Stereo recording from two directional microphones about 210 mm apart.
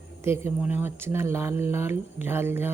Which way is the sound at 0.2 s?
10° right (ahead or behind).